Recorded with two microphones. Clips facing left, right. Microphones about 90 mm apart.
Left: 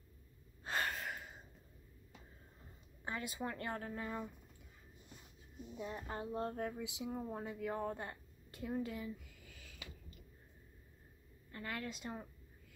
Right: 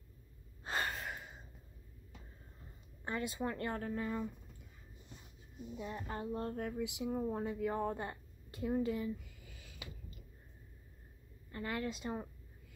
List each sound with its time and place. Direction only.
0.7 s gasp: centre (ahead or behind)
3.1 s speech: centre (ahead or behind)
5.8 s speech: 5° left (ahead or behind)
6.0 s speech: 20° left (ahead or behind)
7.1 s speech: 5° right (ahead or behind)
9.5 s a sound: 10° right (ahead or behind)
11.5 s a woman's voice: 10° right (ahead or behind)